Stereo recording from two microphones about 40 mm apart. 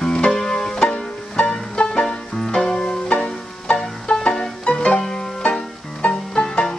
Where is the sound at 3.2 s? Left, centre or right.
Left.